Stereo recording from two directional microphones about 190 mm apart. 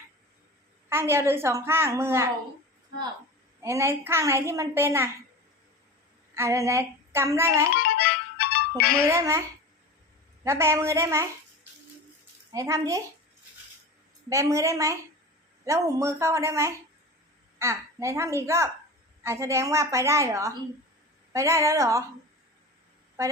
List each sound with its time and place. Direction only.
0.9 s a child's voice: 15° right (ahead or behind)
3.6 s a child's voice: 15° right (ahead or behind)
6.3 s a woman's voice: 15° right (ahead or behind)
7.9 s music: 55° left (ahead or behind)
9.1 s a child's voice: 15° right (ahead or behind)
10.4 s a child's voice: 15° right (ahead or behind)
12.5 s a child's voice: 15° right (ahead or behind)
14.3 s a child's voice: 15° right (ahead or behind)
23.2 s speech: 15° right (ahead or behind)